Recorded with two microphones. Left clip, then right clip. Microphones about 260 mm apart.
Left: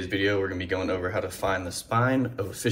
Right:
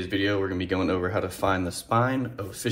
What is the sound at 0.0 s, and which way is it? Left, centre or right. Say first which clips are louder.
Speech: even; centre.